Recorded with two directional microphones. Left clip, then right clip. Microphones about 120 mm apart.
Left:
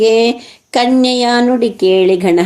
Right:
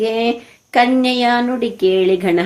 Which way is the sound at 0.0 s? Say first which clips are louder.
Left 7 dB; 40° left (ahead or behind).